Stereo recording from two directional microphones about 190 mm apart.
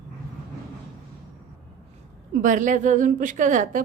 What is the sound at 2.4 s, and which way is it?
A woman's voice, 40° right (ahead or behind).